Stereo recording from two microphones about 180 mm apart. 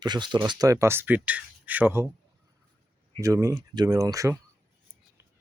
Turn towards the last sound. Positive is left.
turn(degrees=-20)  # may be behind; listen again after turning